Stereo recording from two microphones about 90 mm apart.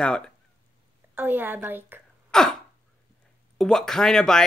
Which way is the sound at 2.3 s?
5° left (ahead or behind).